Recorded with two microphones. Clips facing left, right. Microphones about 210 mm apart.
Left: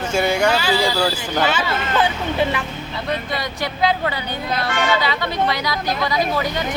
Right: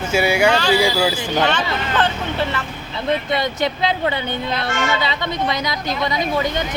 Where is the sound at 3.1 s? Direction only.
25° right (ahead or behind).